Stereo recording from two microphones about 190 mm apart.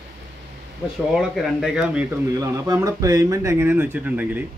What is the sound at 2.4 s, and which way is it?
Speech, 15° right (ahead or behind).